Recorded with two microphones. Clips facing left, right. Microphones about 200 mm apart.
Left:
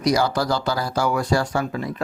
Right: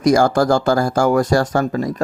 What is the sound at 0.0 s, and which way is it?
Speech, 50° right (ahead or behind).